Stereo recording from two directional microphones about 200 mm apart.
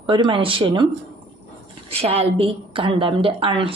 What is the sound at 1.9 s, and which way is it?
A woman's voice, 30° right (ahead or behind).